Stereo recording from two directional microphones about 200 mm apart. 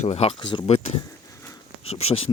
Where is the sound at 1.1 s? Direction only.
15° left (ahead or behind).